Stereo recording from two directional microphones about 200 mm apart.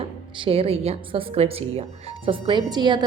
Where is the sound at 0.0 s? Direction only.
30° right (ahead or behind).